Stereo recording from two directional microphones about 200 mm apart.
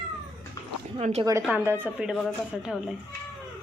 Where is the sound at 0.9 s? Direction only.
30° right (ahead or behind).